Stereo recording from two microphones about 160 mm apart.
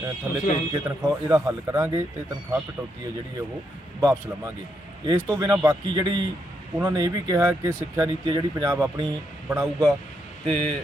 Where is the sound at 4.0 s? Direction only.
20° right (ahead or behind).